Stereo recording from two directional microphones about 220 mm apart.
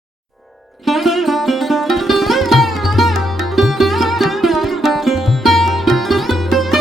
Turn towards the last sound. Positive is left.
turn(degrees=0)  # may be behind; listen again after turning